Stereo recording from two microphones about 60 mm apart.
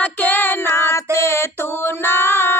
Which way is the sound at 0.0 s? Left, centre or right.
Left.